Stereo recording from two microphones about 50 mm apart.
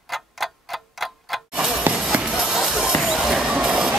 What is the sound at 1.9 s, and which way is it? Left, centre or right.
Music, right.